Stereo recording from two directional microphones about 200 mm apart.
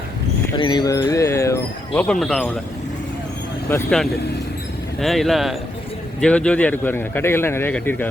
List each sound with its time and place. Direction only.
0.5 s a sound: 20° left (ahead or behind)
1.9 s speech: 5° left (ahead or behind)
3.7 s speech: 10° left (ahead or behind)